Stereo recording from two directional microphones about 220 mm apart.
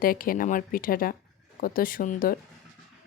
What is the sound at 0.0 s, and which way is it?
A woman's voice, 40° left (ahead or behind).